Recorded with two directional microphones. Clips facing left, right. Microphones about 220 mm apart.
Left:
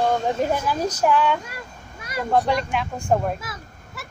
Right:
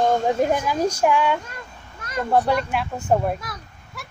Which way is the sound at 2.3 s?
10° right (ahead or behind).